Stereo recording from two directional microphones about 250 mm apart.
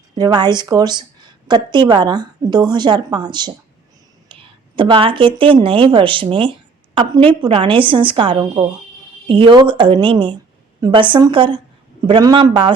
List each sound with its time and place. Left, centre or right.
0.2 s a woman's voice: centre